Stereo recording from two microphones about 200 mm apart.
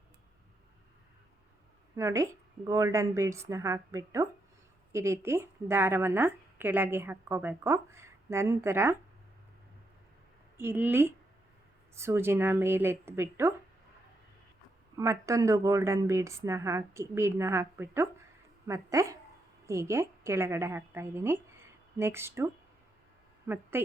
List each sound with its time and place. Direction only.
2.0 s a woman's voice: 15° right (ahead or behind)
10.6 s a woman's voice: 10° right (ahead or behind)
14.9 s a woman's voice: 15° right (ahead or behind)
23.7 s a woman's voice: 10° right (ahead or behind)